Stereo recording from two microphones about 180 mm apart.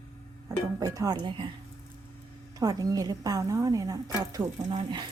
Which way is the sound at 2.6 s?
20° right (ahead or behind).